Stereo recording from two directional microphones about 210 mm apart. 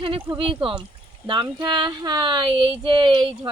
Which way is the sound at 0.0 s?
25° right (ahead or behind).